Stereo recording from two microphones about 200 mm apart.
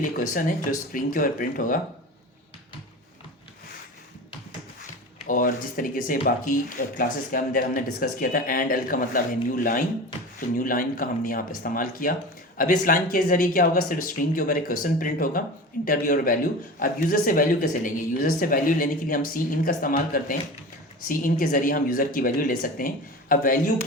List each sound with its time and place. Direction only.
0.2 s speech: 45° left (ahead or behind)
5.2 s speech: 45° left (ahead or behind)